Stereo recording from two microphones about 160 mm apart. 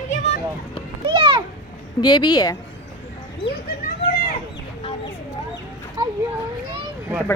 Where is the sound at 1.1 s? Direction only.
30° right (ahead or behind).